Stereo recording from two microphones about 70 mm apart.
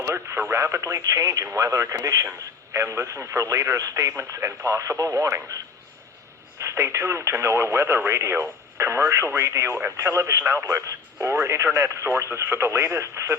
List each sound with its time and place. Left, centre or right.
0.1 s speech: right
0.6 s speech: right
2.7 s speech: right
6.6 s speech: right